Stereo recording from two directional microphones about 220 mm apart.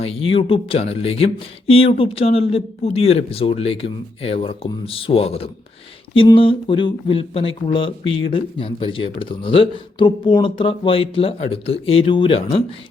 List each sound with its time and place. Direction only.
0.0 s speech: 25° left (ahead or behind)